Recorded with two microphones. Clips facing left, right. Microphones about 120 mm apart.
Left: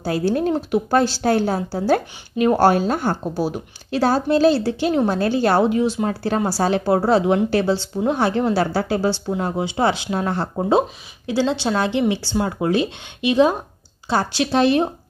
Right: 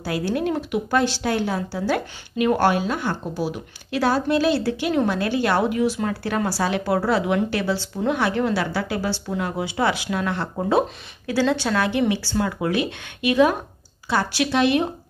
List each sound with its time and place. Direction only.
0.0 s speech: 30° left (ahead or behind)
10.7 s a woman's voice: 20° left (ahead or behind)